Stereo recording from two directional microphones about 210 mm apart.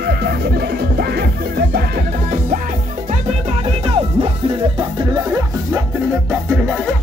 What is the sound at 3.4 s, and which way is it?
Music, 25° right (ahead or behind).